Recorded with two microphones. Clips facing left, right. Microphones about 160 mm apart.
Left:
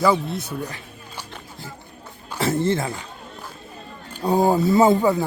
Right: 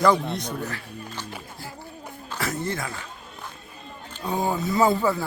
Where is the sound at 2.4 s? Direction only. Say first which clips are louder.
Left 8 dB; 25° left (ahead or behind).